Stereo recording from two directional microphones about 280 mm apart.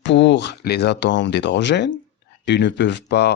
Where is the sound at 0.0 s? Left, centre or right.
Left.